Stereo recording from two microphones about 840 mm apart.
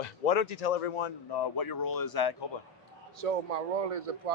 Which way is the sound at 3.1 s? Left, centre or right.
Right.